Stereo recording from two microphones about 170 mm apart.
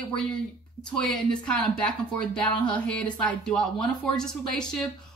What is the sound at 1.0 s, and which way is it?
Speech, 5° left (ahead or behind).